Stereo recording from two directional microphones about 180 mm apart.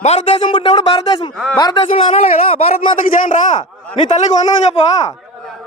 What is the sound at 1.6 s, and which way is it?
Speech, 25° left (ahead or behind).